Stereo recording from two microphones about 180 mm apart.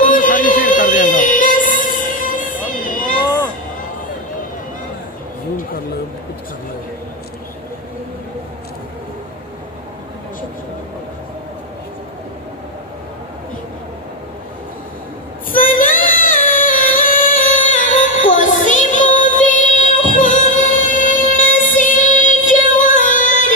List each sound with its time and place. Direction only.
0.0 s music: 50° left (ahead or behind)
15.5 s singing: 50° left (ahead or behind)